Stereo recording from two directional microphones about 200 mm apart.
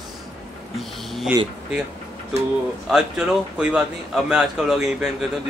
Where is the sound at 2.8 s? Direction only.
5° right (ahead or behind).